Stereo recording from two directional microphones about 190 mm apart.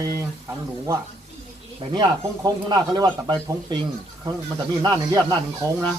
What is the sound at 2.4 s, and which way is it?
Speech, 20° right (ahead or behind).